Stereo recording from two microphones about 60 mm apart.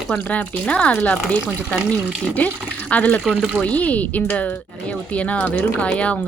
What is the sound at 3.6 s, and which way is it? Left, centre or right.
Speech, left.